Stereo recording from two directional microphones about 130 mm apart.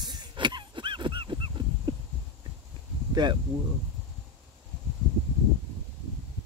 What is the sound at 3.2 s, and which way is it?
Speech, 35° right (ahead or behind).